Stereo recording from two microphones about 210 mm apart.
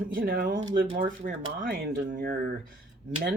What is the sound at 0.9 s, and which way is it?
Speech, 40° right (ahead or behind).